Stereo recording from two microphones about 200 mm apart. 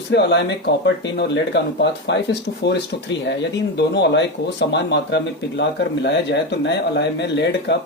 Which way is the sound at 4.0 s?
60° left (ahead or behind).